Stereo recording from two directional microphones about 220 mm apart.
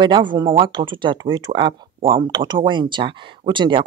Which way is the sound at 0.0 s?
20° right (ahead or behind).